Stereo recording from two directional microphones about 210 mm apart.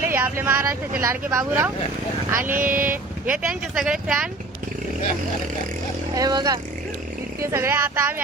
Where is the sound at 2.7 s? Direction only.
40° right (ahead or behind).